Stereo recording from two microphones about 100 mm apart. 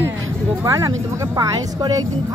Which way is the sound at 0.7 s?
35° right (ahead or behind).